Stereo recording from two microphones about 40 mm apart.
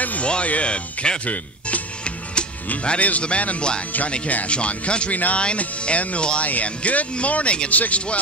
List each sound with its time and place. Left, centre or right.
0.0 s music: left
0.3 s speech: left
1.2 s music: left
2.8 s speech: left
5.1 s speech: left
5.4 s speech: left